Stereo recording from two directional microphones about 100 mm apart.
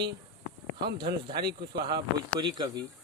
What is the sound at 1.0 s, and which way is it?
Speech, 50° right (ahead or behind).